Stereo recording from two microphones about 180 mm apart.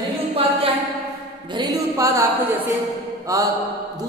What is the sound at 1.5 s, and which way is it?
Speech, 25° right (ahead or behind).